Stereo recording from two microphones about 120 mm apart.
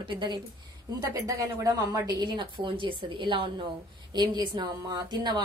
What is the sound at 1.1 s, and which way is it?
A woman's voice, 25° right (ahead or behind).